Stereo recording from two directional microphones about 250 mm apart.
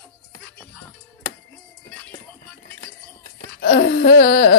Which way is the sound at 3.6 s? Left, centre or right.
Left.